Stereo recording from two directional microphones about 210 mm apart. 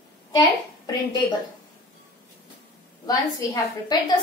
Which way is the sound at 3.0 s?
15° left (ahead or behind).